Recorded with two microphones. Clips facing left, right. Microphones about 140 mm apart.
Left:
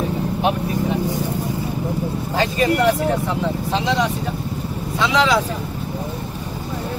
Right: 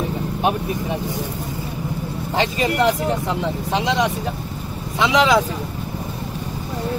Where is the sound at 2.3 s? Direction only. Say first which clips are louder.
Left 1 dB; 20° right (ahead or behind).